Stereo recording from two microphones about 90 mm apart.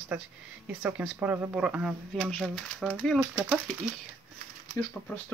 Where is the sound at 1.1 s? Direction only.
25° right (ahead or behind).